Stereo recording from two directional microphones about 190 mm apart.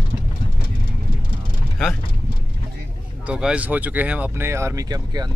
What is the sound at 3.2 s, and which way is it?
Speech, 5° right (ahead or behind).